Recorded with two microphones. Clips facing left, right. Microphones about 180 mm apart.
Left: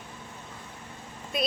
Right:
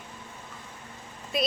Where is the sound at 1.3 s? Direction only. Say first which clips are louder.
Right 2 dB; centre (ahead or behind).